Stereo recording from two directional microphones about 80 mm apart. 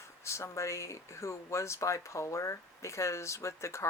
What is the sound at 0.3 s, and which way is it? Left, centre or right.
Speech, left.